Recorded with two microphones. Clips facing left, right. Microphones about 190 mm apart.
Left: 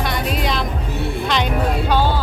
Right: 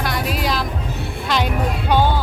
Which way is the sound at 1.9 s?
15° right (ahead or behind).